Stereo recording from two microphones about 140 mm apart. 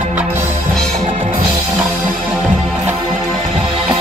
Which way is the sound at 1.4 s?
30° right (ahead or behind).